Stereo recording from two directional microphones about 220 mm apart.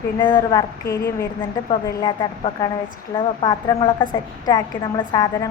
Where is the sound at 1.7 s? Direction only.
20° left (ahead or behind).